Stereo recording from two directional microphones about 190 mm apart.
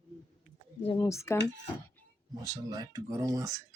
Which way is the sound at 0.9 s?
15° left (ahead or behind).